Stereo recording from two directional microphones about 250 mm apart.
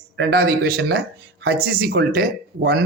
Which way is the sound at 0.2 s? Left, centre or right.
Right.